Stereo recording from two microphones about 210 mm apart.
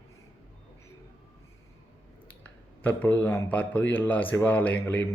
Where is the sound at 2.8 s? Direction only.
10° left (ahead or behind).